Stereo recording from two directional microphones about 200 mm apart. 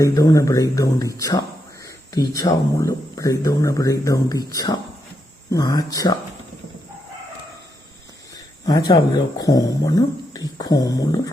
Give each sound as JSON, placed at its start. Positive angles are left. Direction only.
{"t": 0.0, "sound": "speech", "side_deg": 15}
{"t": 8.6, "sound": "speech", "side_deg": 20}